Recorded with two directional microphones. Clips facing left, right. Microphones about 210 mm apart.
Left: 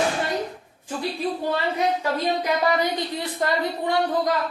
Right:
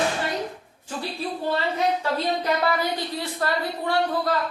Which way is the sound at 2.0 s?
15° left (ahead or behind).